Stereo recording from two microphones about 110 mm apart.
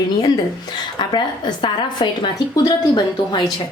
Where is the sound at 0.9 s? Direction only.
40° left (ahead or behind).